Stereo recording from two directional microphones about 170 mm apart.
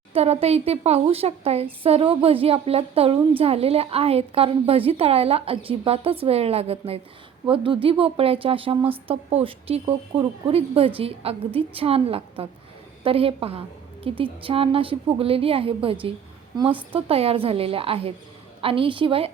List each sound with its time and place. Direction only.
0.1 s a woman's voice: 35° right (ahead or behind)